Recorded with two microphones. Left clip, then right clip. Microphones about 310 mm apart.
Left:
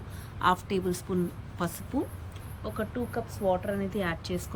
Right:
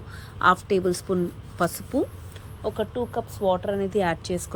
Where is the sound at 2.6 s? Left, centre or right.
Centre.